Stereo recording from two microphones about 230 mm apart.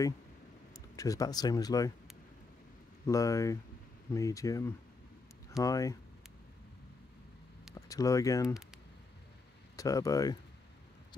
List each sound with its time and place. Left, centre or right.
0.9 s speech: centre
3.1 s speech: centre
7.7 s speech: centre
9.8 s speech: centre